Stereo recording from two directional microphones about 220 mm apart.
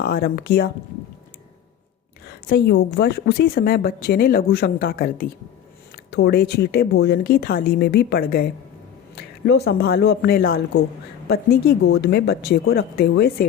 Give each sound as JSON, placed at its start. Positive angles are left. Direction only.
{"t": 0.0, "sound": "a woman's voice", "side_deg": 45}
{"t": 2.2, "sound": "a woman's voice", "side_deg": 50}